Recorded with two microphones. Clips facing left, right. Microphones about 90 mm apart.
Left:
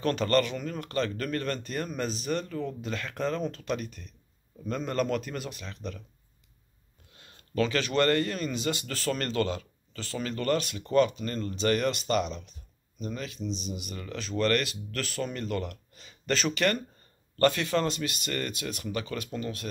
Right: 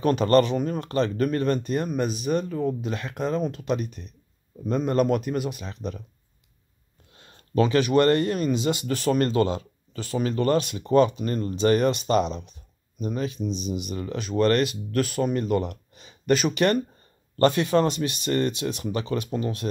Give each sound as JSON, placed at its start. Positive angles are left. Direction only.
{"t": 0.0, "sound": "speech", "side_deg": -20}
{"t": 7.2, "sound": "speech", "side_deg": -30}